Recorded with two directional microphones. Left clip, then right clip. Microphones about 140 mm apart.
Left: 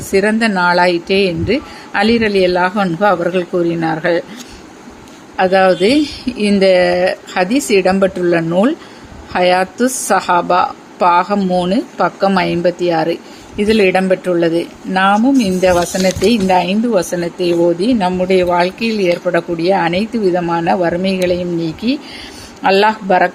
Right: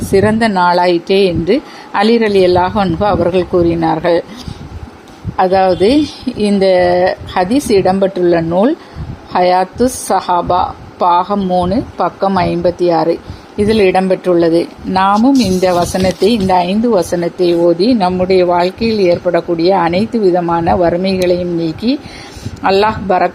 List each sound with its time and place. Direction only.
0.1 s a woman's voice: 25° right (ahead or behind)
5.4 s a woman's voice: 20° right (ahead or behind)